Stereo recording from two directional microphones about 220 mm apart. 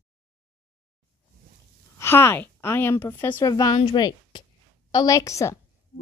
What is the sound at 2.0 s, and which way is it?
Speech, 10° left (ahead or behind).